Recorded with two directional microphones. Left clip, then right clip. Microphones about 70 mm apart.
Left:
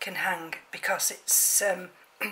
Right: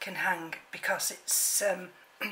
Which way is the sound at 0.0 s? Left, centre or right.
Left.